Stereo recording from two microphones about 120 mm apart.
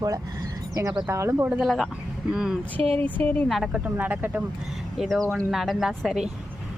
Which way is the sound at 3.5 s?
Centre (ahead or behind).